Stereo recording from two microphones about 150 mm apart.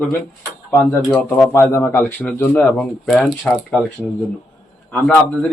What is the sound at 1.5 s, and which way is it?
Speech, 15° left (ahead or behind).